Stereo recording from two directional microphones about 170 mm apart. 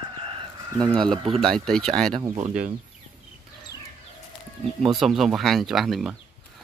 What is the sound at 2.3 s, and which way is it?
Speech, 45° right (ahead or behind).